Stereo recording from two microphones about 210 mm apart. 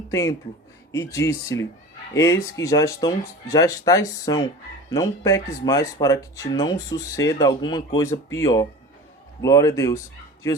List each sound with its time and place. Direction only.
0.1 s speech: 15° left (ahead or behind)